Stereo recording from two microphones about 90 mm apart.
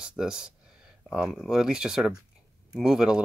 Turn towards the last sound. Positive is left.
turn(degrees=-5)  # may be behind; listen again after turning